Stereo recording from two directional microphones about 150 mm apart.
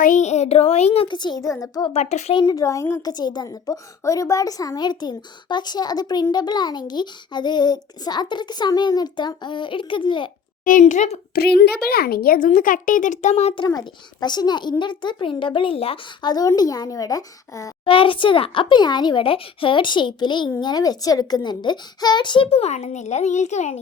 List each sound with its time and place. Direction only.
0.0 s speech: 55° left (ahead or behind); by 1.9 s 25° left (ahead or behind)
1.9 s speech: 45° left (ahead or behind)
2.4 s speech: 25° left (ahead or behind)
10.6 s a child's voice: 60° left (ahead or behind)
11.3 s a child's voice: 90° left
12.5 s a child's voice: 60° left (ahead or behind); by 13.7 s 45° left (ahead or behind)
13.7 s speech: 25° left (ahead or behind)
16.3 s speech: 25° left (ahead or behind)
17.8 s speech: 35° left (ahead or behind)